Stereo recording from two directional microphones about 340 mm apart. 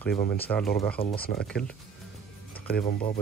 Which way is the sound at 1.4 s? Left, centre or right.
Centre.